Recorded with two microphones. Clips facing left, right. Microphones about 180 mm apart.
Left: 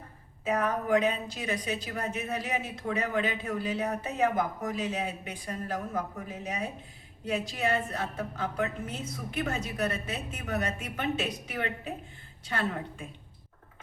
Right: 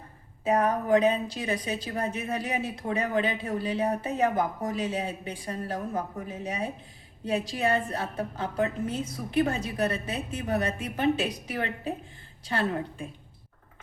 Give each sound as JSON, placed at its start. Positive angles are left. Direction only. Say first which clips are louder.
{"t": 0.4, "sound": "a woman's voice", "louder": "right 4 dB", "side_deg": -35}
{"t": 7.3, "sound": "a woman's voice", "louder": "right 3 dB", "side_deg": -35}